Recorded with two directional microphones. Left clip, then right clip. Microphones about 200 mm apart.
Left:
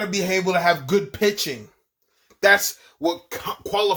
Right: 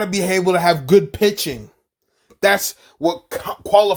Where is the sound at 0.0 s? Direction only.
50° right (ahead or behind).